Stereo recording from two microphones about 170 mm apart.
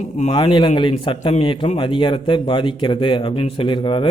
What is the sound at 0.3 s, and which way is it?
A man's voice, 30° left (ahead or behind).